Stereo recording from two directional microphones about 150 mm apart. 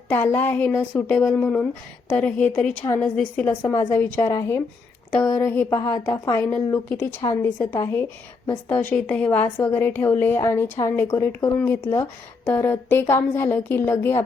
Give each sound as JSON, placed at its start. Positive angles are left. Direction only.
{"t": 0.1, "sound": "a woman's voice", "side_deg": 15}